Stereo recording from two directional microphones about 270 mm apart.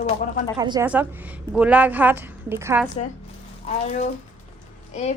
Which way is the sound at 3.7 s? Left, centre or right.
Left.